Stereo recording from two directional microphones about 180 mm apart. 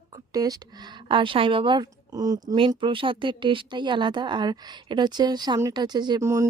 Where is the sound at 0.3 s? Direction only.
20° right (ahead or behind).